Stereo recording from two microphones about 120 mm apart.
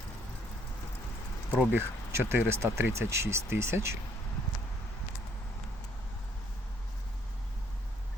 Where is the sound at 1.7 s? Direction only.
20° right (ahead or behind).